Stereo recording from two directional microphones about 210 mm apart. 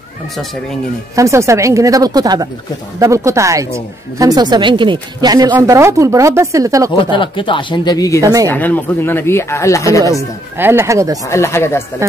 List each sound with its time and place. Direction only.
1.1 s speech: 15° right (ahead or behind)
6.9 s speech: 25° left (ahead or behind)
8.2 s speech: 15° right (ahead or behind)
8.5 s speech: 10° left (ahead or behind)
10.1 s speech: 10° right (ahead or behind)
11.2 s speech: 15° left (ahead or behind)